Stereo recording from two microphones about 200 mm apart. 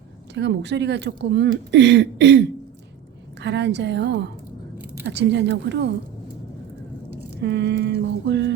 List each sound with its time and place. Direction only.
0.3 s speech: 60° right (ahead or behind)
7.4 s speech: 60° right (ahead or behind)